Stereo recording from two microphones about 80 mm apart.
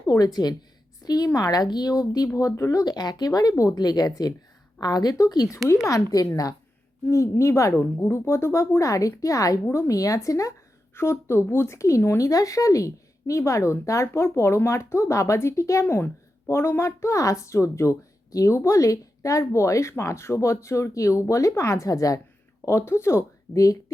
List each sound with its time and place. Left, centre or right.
0.0 s a woman's voice: left
2.8 s a woman's voice: left
10.9 s speech: left
22.6 s speech: left